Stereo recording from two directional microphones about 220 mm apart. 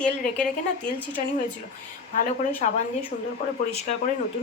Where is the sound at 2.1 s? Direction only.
35° left (ahead or behind).